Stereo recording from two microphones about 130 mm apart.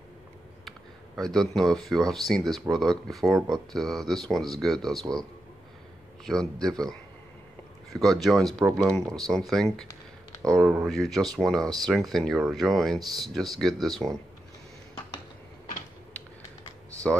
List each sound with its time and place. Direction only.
1.2 s speech: 5° left (ahead or behind)
3.3 s speech: 30° right (ahead or behind)
3.7 s speech: centre (ahead or behind)
6.2 s speech: 5° left (ahead or behind)
7.9 s speech: centre (ahead or behind)
17.0 s speech: centre (ahead or behind)